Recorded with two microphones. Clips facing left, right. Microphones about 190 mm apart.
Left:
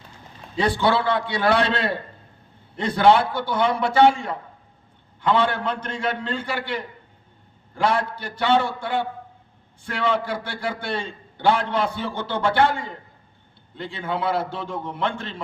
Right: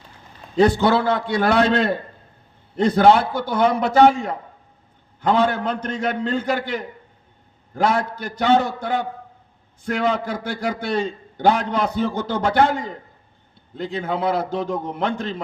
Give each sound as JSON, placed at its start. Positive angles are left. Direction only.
{"t": 0.5, "sound": "a man's voice", "side_deg": -45}